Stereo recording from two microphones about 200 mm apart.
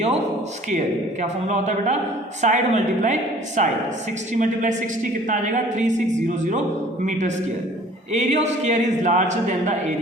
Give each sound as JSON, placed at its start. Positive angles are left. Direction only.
{"t": 1.2, "sound": "a man's voice", "side_deg": -35}
{"t": 7.0, "sound": "a man's voice", "side_deg": -35}